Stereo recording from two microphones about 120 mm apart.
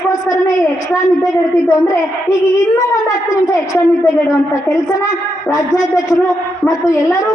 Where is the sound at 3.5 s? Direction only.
25° left (ahead or behind).